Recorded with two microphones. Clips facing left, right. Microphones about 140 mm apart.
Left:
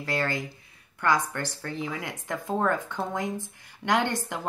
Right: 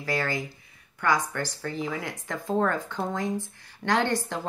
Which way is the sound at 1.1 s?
25° left (ahead or behind).